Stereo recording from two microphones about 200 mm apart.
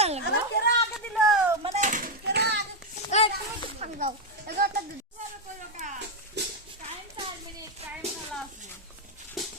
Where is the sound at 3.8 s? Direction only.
40° right (ahead or behind).